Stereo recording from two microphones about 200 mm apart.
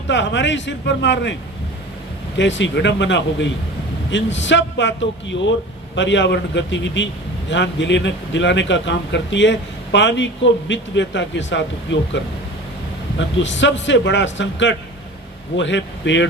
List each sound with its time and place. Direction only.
0.1 s a man's voice: 65° left (ahead or behind)
2.4 s a man's voice: 65° left (ahead or behind)